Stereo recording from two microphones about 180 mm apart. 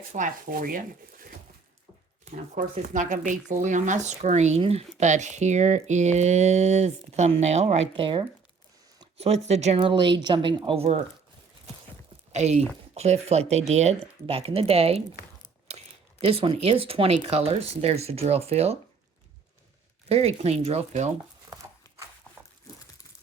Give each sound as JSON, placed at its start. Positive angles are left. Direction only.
{"t": 0.1, "sound": "speech", "side_deg": -45}
{"t": 2.2, "sound": "speech", "side_deg": -45}
{"t": 12.3, "sound": "speech", "side_deg": -40}
{"t": 16.4, "sound": "speech", "side_deg": -35}
{"t": 20.1, "sound": "speech", "side_deg": -35}